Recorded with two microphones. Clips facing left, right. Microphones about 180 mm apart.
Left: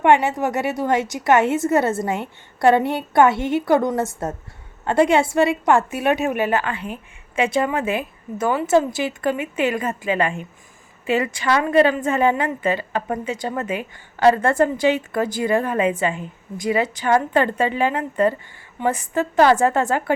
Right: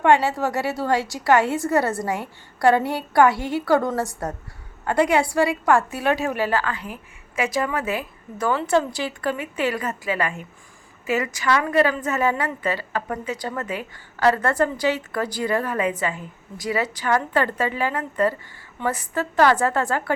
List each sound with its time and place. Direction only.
0.0 s a woman's voice: 20° left (ahead or behind)